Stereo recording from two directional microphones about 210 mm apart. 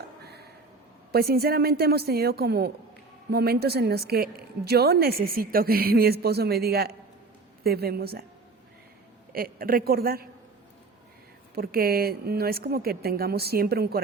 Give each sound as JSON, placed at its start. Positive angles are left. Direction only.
{"t": 1.1, "sound": "a woman's voice", "side_deg": -45}
{"t": 9.3, "sound": "a woman's voice", "side_deg": -45}
{"t": 11.5, "sound": "a woman's voice", "side_deg": -45}